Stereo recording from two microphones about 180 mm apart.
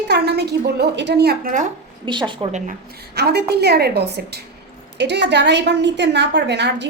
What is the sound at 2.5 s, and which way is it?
Speech, 40° right (ahead or behind).